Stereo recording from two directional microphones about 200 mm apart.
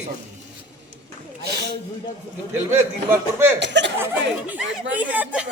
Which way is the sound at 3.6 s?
60° right (ahead or behind).